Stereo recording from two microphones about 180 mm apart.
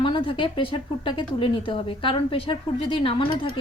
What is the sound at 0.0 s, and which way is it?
A woman's voice, 30° left (ahead or behind).